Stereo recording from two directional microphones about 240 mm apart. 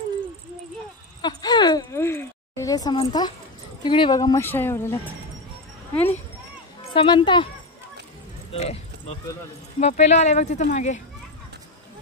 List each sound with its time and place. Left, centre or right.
1.2 s a sound: centre
3.8 s speech: centre
6.9 s speech: left
8.5 s speech: left